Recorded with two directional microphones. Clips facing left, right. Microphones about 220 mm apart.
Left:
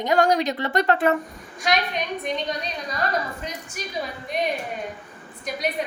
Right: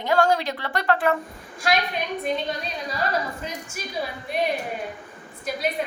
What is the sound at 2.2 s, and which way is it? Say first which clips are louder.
Speech: right 1 dB; 5° right (ahead or behind).